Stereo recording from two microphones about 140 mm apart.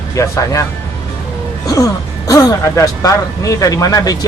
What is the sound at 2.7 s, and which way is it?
Speech, 25° left (ahead or behind).